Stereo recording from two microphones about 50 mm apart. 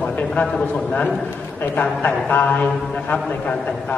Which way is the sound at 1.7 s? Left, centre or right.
Left.